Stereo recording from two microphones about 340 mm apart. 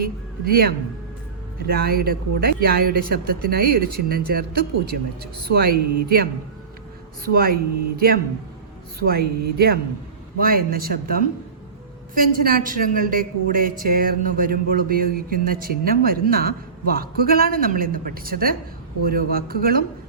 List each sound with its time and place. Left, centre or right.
0.0 s a woman's voice: right
7.3 s a woman's voice: right